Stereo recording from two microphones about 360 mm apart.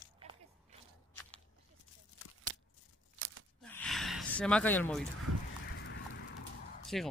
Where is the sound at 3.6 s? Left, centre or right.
Centre.